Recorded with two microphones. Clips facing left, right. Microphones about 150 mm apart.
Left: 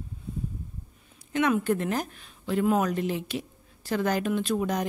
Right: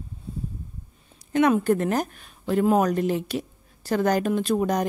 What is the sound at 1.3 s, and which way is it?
A woman's voice, 40° right (ahead or behind).